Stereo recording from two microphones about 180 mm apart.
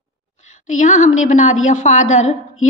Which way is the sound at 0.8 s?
45° left (ahead or behind).